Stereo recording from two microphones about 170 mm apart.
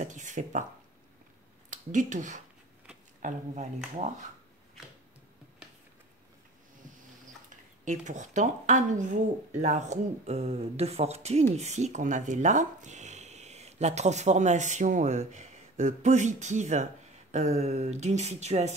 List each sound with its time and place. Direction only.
0.0 s a woman's voice: 45° right (ahead or behind)
1.7 s a woman's voice: 45° right (ahead or behind)
7.4 s a woman's voice: 45° right (ahead or behind)